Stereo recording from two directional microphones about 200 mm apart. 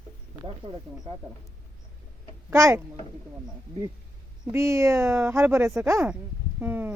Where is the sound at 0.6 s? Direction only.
20° right (ahead or behind).